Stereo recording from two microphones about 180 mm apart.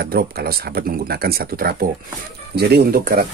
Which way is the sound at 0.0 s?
60° right (ahead or behind).